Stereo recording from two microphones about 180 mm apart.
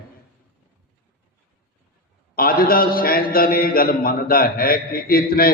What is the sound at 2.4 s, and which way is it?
A man's voice, 55° left (ahead or behind).